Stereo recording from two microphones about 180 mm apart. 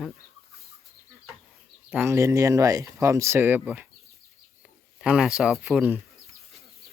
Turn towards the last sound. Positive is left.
turn(degrees=-10)  # may be behind; listen again after turning